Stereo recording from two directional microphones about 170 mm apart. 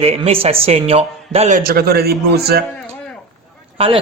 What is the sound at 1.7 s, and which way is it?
Speech, 65° right (ahead or behind).